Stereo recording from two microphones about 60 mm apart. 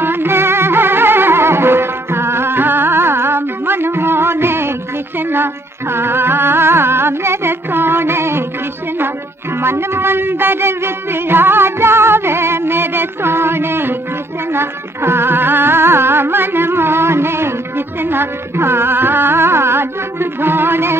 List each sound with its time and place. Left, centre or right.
0.0 s music: right
9.6 s music: right